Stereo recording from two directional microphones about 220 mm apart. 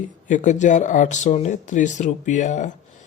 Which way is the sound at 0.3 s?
35° left (ahead or behind).